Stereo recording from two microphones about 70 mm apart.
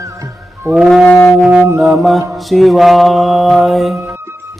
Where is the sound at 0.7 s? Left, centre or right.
Centre.